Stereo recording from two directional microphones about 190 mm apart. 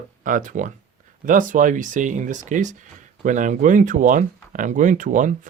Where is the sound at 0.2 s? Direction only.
45° right (ahead or behind).